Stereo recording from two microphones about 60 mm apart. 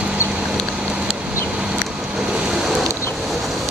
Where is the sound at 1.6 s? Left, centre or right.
Centre.